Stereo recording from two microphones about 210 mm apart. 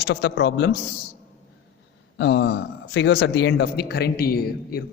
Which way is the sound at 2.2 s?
55° left (ahead or behind).